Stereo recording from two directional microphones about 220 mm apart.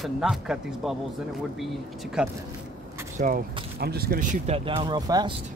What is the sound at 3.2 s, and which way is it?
Speech, 40° right (ahead or behind).